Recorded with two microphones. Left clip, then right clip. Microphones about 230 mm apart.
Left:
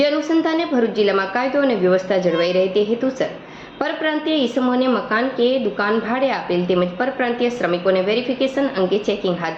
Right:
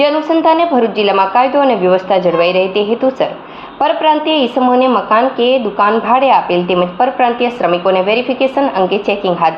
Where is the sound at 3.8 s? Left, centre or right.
Right.